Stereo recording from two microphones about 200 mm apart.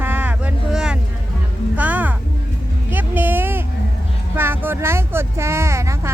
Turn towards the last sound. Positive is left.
turn(degrees=-15)  # may be behind; listen again after turning